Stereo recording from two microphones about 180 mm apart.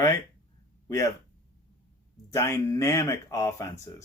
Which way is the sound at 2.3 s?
15° left (ahead or behind).